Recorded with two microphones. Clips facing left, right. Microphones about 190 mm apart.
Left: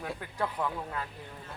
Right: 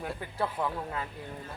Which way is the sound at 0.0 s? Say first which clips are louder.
Right 1 dB; 5° right (ahead or behind).